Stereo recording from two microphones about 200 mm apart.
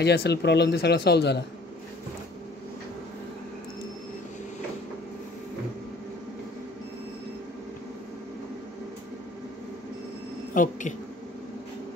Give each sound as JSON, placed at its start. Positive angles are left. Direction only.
{"t": 0.0, "sound": "speech", "side_deg": 55}
{"t": 10.5, "sound": "speech", "side_deg": 40}